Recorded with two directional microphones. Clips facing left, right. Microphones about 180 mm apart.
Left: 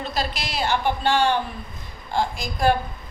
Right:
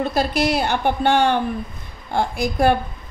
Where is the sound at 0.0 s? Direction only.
55° right (ahead or behind).